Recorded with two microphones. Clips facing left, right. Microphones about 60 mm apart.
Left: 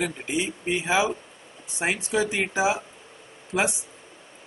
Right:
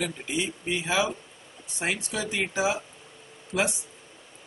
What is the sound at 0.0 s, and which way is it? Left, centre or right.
Speech, left.